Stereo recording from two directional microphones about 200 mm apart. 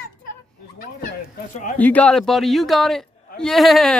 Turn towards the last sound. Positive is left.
turn(degrees=0)  # may be behind; listen again after turning